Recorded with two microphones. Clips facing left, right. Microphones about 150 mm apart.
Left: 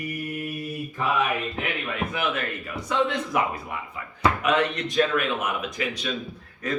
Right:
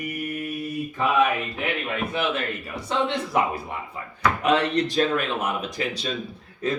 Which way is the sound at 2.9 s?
30° right (ahead or behind).